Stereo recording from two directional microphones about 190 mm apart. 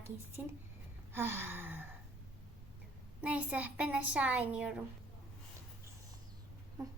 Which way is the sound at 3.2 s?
5° right (ahead or behind).